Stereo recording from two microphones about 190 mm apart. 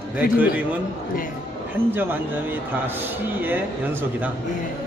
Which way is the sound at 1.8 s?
10° right (ahead or behind).